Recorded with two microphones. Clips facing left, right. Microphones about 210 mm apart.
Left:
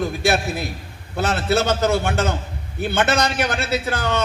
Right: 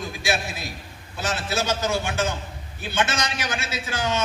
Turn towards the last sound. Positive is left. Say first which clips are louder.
# left 4 dB
turn(degrees=60)  # may be behind; listen again after turning